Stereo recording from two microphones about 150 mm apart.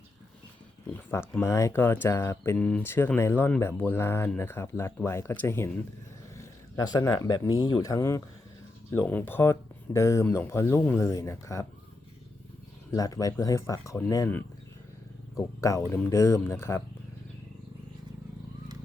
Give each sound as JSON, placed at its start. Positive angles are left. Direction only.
{"t": 1.1, "sound": "speech", "side_deg": 15}
{"t": 6.3, "sound": "a sound", "side_deg": 20}
{"t": 7.2, "sound": "speech", "side_deg": 25}
{"t": 12.9, "sound": "speech", "side_deg": 25}
{"t": 15.4, "sound": "speech", "side_deg": 20}